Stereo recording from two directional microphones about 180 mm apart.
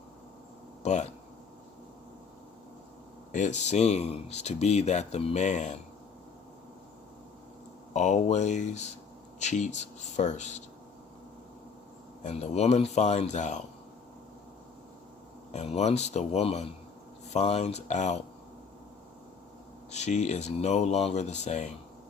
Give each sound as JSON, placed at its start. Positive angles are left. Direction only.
{"t": 0.8, "sound": "a sound", "side_deg": 40}
{"t": 3.3, "sound": "speech", "side_deg": 40}
{"t": 7.9, "sound": "speech", "side_deg": 40}
{"t": 12.2, "sound": "speech", "side_deg": 35}
{"t": 15.5, "sound": "speech", "side_deg": 35}
{"t": 19.9, "sound": "speech", "side_deg": 40}